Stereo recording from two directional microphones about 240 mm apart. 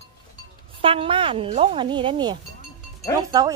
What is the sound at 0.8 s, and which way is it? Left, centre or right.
Speech, right.